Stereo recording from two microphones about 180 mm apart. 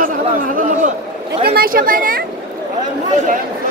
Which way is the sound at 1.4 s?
55° right (ahead or behind).